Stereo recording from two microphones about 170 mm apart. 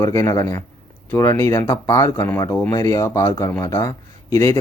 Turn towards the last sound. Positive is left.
turn(degrees=15)  # may be behind; listen again after turning